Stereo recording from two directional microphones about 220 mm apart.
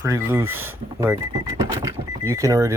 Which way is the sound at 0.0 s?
10° right (ahead or behind).